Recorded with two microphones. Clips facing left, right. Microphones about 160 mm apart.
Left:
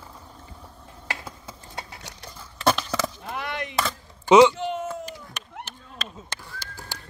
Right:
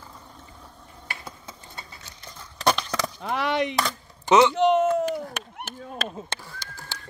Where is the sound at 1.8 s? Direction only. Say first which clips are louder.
Left 5 dB; 75° left (ahead or behind).